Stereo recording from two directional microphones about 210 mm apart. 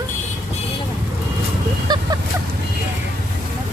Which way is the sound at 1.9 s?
20° right (ahead or behind).